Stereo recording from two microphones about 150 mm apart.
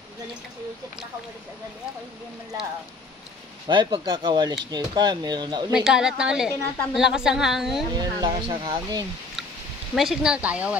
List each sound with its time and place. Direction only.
3.6 s speech: 30° right (ahead or behind)
5.7 s a woman's voice: 5° right (ahead or behind)
7.9 s speech: 30° right (ahead or behind)
9.9 s speech: 5° right (ahead or behind)